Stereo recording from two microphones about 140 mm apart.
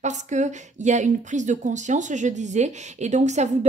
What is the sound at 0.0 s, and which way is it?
A woman's voice, 60° right (ahead or behind).